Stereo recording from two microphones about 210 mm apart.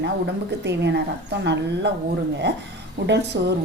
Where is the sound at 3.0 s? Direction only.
55° right (ahead or behind).